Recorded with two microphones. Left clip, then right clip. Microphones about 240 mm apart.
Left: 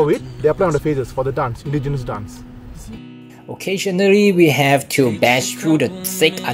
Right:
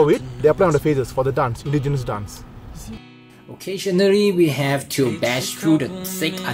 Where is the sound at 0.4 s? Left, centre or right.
Centre.